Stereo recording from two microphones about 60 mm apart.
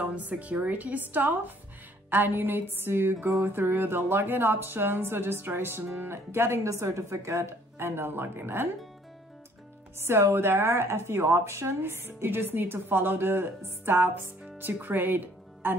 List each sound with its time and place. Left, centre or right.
0.0 s a woman's voice: right
3.3 s a sound: right
3.5 s speech: right
7.8 s speech: right
9.9 s speech: right